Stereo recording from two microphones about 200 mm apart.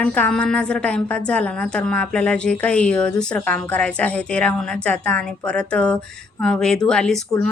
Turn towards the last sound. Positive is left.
turn(degrees=5)  # may be behind; listen again after turning